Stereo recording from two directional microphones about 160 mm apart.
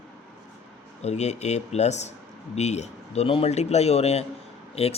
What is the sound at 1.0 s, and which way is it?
Speech, 45° left (ahead or behind).